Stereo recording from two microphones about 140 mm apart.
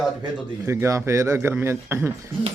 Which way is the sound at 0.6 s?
20° right (ahead or behind).